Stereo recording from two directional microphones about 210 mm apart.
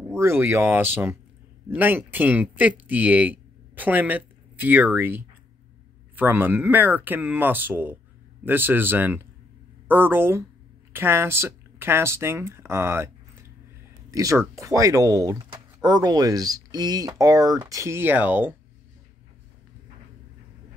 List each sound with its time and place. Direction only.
0.1 s speech: 10° right (ahead or behind)
14.1 s speech: 15° right (ahead or behind)